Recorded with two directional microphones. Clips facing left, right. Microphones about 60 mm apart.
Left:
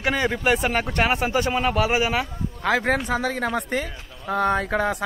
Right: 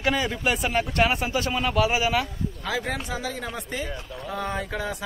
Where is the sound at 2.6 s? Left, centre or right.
Left.